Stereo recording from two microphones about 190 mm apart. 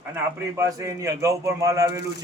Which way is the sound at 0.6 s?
15° right (ahead or behind).